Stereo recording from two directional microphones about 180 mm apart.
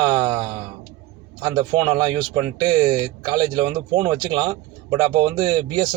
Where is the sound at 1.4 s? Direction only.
25° right (ahead or behind).